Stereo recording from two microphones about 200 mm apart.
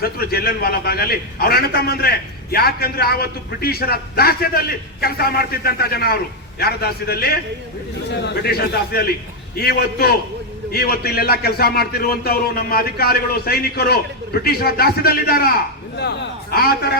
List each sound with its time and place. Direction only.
0.0 s a man's voice: 50° left (ahead or behind)